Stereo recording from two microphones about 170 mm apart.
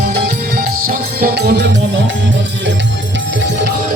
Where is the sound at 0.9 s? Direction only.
65° right (ahead or behind).